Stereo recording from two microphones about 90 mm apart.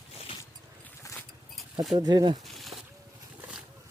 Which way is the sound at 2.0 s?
50° right (ahead or behind).